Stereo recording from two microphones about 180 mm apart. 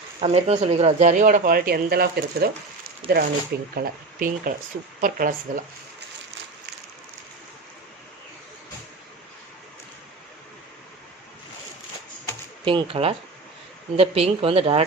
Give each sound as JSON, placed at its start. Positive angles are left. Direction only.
{"t": 0.2, "sound": "speech", "side_deg": -35}
{"t": 3.0, "sound": "speech", "side_deg": -30}
{"t": 3.8, "sound": "speech", "side_deg": -50}
{"t": 12.6, "sound": "speech", "side_deg": -30}